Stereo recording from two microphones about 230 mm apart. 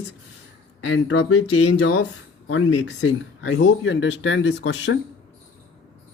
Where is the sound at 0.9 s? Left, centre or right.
Left.